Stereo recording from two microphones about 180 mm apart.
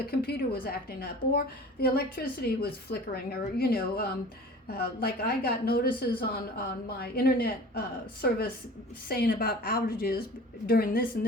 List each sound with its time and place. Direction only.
0.0 s a woman's voice: 60° left (ahead or behind)